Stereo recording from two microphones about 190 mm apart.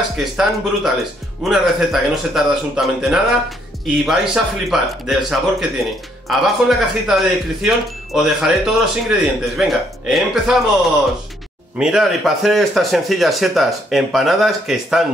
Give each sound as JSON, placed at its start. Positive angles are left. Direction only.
{"t": 0.2, "sound": "speech", "side_deg": 0}
{"t": 11.8, "sound": "speech", "side_deg": 0}